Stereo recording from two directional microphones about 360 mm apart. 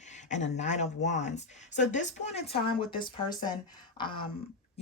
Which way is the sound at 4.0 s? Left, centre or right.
Centre.